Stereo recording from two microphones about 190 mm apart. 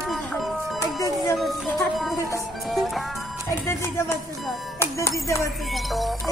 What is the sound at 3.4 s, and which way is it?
Music, 15° left (ahead or behind).